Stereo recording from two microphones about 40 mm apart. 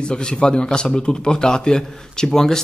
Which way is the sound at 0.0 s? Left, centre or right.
Left.